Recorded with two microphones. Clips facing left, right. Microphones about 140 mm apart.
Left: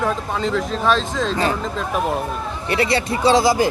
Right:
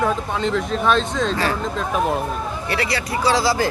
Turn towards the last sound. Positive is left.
turn(degrees=20)  # may be behind; listen again after turning